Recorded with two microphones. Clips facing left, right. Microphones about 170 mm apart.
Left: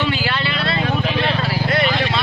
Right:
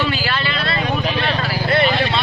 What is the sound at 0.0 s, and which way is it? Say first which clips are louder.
Vehicle: even; 20° left (ahead or behind).